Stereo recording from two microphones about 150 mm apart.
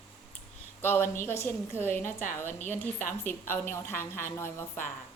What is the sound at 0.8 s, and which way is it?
A woman's voice, 15° left (ahead or behind).